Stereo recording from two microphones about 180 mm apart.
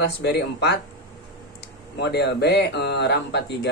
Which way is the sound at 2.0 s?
65° left (ahead or behind).